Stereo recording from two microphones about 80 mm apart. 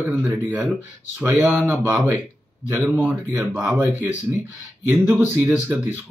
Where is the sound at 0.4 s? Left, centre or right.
Right.